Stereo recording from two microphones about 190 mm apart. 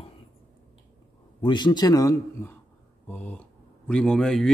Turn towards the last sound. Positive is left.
turn(degrees=5)  # may be behind; listen again after turning